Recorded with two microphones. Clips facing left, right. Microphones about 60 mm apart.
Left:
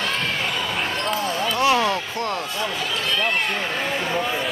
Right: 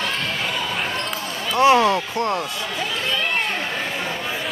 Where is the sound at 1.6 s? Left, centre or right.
Right.